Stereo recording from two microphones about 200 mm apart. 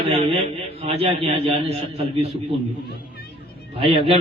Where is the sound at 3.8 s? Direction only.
30° right (ahead or behind).